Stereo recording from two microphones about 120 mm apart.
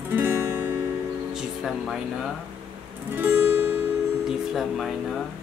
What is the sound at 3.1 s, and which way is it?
Music, 15° right (ahead or behind).